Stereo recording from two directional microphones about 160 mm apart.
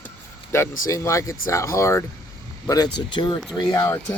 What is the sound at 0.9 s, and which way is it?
Speech, 20° left (ahead or behind).